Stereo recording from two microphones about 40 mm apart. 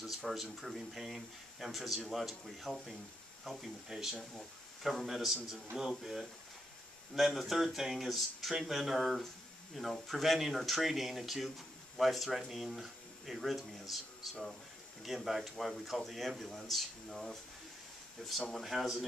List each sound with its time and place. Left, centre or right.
0.0 s speech: centre
18.6 s speech: centre